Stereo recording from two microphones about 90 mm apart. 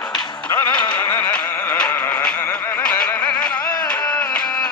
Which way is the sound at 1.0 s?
25° left (ahead or behind).